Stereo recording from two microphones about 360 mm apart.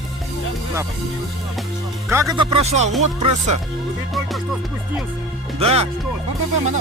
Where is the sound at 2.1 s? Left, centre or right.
Centre.